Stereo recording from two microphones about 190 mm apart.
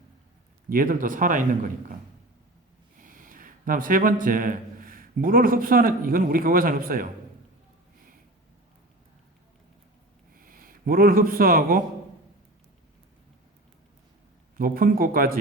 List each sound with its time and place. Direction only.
0.7 s a man's voice: 45° right (ahead or behind)
3.0 s speech: 45° right (ahead or behind)
10.3 s speech: 50° right (ahead or behind)
14.5 s a man's voice: 50° right (ahead or behind)